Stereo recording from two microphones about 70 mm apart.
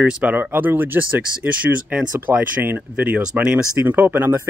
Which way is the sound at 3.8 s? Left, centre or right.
Right.